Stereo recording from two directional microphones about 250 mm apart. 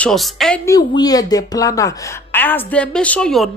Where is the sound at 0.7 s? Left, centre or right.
Centre.